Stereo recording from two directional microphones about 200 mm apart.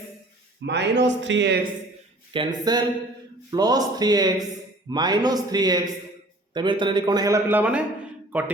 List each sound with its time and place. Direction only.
0.6 s speech: 60° right (ahead or behind)
2.3 s a man's voice: 20° right (ahead or behind)